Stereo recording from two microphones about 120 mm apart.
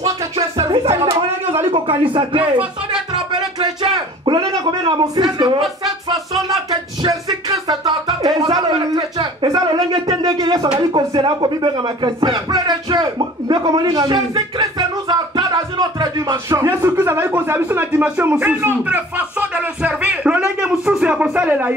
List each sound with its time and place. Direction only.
0.6 s music: 45° right (ahead or behind)
1.7 s speech: 45° right (ahead or behind)
3.8 s a sound: 40° right (ahead or behind)
6.7 s music: 35° right (ahead or behind)
10.2 s a sound: 35° right (ahead or behind)
10.9 s speech: 40° right (ahead or behind); by 21.7 s 15° right (ahead or behind)